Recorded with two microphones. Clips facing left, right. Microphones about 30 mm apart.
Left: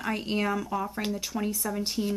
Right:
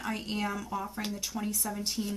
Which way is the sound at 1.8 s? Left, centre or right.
Left.